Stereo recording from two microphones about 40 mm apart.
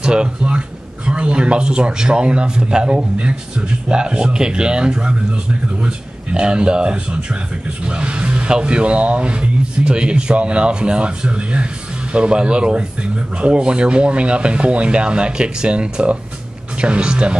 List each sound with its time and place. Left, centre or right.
0.0 s a man's voice: right